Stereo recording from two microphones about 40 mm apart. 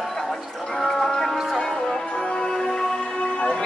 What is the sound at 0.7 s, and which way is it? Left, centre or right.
Music, centre.